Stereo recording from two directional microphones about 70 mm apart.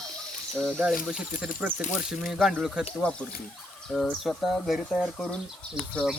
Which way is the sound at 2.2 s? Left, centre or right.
Centre.